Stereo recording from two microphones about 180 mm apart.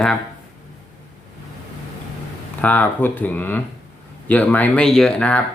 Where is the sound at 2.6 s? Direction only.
10° left (ahead or behind).